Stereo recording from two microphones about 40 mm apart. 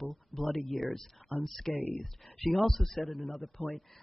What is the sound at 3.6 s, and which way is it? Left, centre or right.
Speech, left.